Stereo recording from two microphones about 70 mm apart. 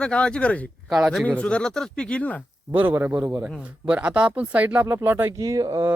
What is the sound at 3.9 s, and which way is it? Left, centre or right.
Speech, centre.